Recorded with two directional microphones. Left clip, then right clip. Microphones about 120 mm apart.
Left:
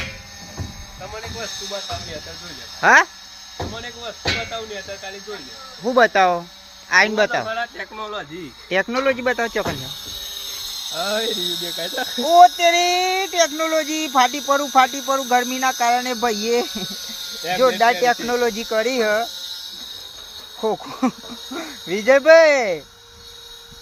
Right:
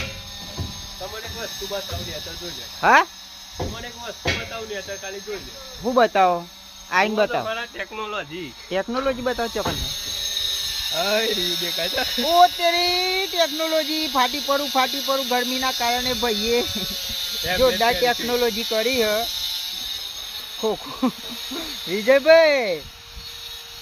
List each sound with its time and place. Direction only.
1.5 s speech: 45° left (ahead or behind)
2.8 s speech: 5° left (ahead or behind)
6.0 s speech: centre (ahead or behind)
8.7 s speech: 10° left (ahead or behind)
9.7 s ratchet: 50° left (ahead or behind); by 11.1 s 35° left (ahead or behind)
11.2 s speech: 20° left (ahead or behind); by 22.8 s 5° left (ahead or behind)